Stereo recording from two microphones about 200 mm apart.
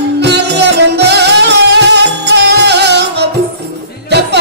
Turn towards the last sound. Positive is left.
turn(degrees=-55)  # may be behind; listen again after turning